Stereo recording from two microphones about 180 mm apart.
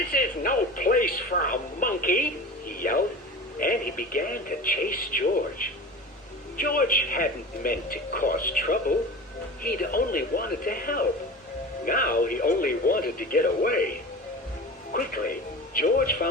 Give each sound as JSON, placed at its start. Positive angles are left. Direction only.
{"t": 0.1, "sound": "a man's voice", "side_deg": 50}
{"t": 2.6, "sound": "music", "side_deg": 50}
{"t": 3.6, "sound": "a man's voice", "side_deg": 50}
{"t": 14.9, "sound": "speech", "side_deg": 50}